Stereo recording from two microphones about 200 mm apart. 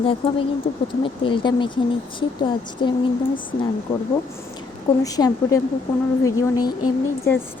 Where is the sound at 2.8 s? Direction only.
25° left (ahead or behind).